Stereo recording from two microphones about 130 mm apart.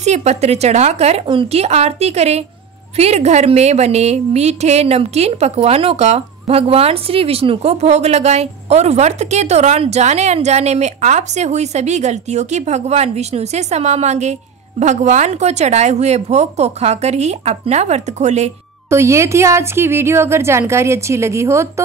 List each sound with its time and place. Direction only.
0.0 s a woman's voice: 60° right (ahead or behind)
1.2 s a woman's voice: 40° right (ahead or behind); by 18.5 s 60° right (ahead or behind)
18.9 s speech: 20° right (ahead or behind)